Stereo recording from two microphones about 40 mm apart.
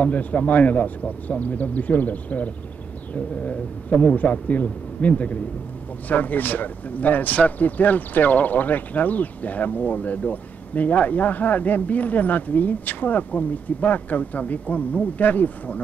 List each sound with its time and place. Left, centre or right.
0.0 s speech: left